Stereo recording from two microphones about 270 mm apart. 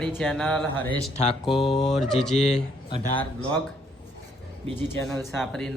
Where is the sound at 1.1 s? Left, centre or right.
Left.